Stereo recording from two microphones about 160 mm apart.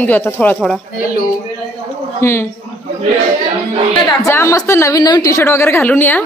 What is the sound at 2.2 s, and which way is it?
Speech, 15° left (ahead or behind).